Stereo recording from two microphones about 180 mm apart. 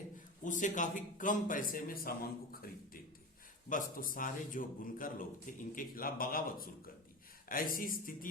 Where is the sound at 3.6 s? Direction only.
45° left (ahead or behind).